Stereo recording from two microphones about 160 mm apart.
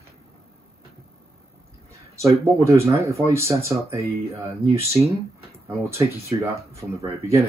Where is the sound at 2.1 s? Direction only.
20° right (ahead or behind).